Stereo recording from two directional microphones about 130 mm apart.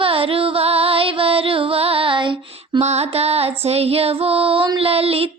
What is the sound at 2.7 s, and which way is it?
Female singing, 55° right (ahead or behind).